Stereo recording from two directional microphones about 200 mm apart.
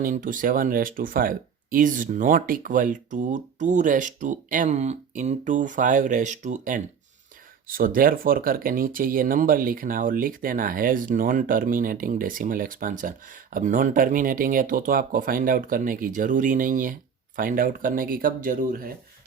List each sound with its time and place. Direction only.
0.0 s speech: 40° right (ahead or behind)